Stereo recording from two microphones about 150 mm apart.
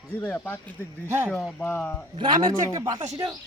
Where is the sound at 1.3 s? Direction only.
5° left (ahead or behind).